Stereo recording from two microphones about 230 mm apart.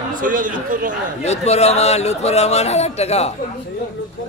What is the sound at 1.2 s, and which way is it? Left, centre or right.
Speech, left.